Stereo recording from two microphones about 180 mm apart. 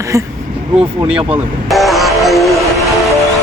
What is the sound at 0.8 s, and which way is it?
Speech, 35° right (ahead or behind).